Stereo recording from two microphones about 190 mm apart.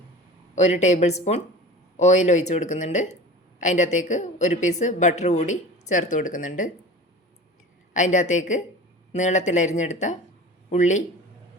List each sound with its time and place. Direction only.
0.5 s speech: 35° left (ahead or behind)
7.9 s speech: 40° left (ahead or behind)